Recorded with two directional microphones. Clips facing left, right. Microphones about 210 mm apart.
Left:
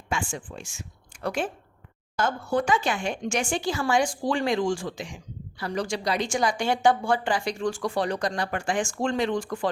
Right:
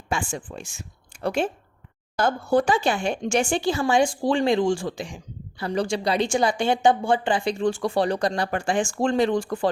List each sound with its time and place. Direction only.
0.1 s speech: 35° right (ahead or behind)